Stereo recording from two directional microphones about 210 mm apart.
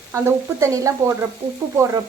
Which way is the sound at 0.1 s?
15° right (ahead or behind).